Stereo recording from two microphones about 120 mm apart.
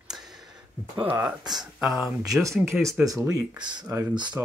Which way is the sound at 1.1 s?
35° right (ahead or behind).